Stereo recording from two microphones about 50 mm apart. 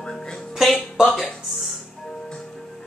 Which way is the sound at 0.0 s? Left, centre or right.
Centre.